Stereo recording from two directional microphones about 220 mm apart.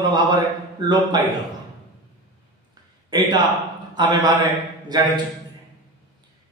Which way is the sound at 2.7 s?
20° right (ahead or behind).